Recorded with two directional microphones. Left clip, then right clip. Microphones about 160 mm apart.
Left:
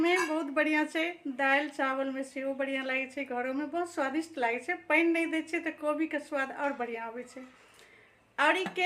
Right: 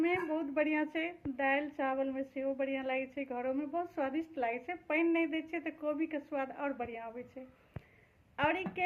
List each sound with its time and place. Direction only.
0.0 s a woman's voice: 30° left (ahead or behind)
8.4 s a woman's voice: 25° left (ahead or behind)